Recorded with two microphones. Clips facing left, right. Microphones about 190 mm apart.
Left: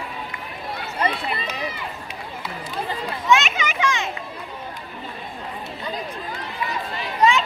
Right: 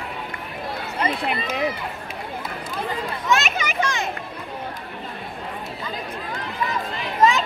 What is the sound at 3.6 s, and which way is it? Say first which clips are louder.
Children playing: left 1 dB; 40° right (ahead or behind).